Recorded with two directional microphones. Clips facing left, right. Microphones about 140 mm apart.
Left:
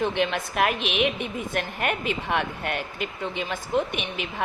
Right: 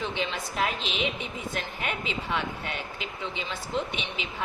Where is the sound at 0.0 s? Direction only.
60° left (ahead or behind).